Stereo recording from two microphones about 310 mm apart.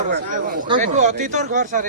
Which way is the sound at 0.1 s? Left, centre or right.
Right.